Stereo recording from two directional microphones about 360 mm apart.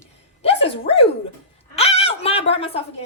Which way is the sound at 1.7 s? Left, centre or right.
Centre.